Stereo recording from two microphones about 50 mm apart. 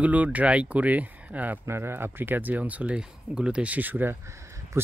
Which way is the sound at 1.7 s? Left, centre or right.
Right.